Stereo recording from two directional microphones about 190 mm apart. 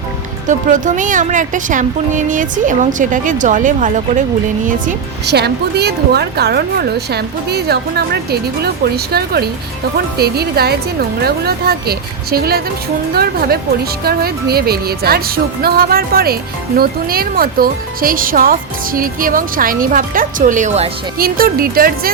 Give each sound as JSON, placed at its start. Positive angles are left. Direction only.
{"t": 0.4, "sound": "speech", "side_deg": -40}
{"t": 5.2, "sound": "a woman's voice", "side_deg": -60}
{"t": 14.0, "sound": "a woman's voice", "side_deg": -55}
{"t": 21.2, "sound": "speech", "side_deg": -50}